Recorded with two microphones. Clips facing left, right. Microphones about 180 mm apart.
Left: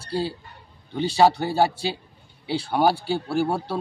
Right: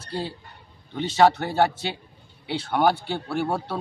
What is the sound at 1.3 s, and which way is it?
Speech, 5° left (ahead or behind).